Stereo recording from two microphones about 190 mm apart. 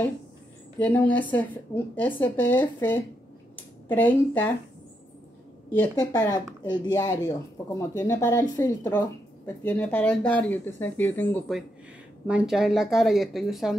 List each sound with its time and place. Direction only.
0.7 s a woman's voice: 10° left (ahead or behind)
5.7 s a woman's voice: 10° left (ahead or behind)
6.6 s a woman's voice: 20° left (ahead or behind); by 13.7 s centre (ahead or behind)